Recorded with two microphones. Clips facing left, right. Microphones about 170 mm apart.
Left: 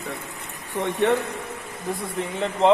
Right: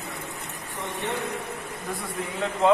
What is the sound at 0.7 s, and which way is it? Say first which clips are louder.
Speech: left 11 dB; 80° left.